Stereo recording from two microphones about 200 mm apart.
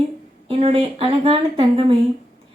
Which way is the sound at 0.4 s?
30° right (ahead or behind).